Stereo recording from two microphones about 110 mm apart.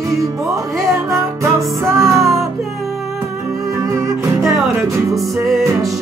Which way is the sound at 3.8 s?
30° right (ahead or behind).